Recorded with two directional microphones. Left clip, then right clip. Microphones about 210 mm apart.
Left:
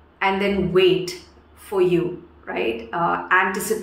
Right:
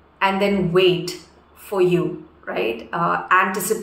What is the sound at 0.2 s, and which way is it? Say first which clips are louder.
A woman's voice: right 2 dB; 5° right (ahead or behind).